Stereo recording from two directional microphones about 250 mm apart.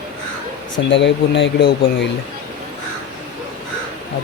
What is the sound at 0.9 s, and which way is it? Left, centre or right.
Speech, left.